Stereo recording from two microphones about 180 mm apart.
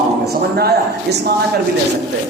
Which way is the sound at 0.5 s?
60° right (ahead or behind).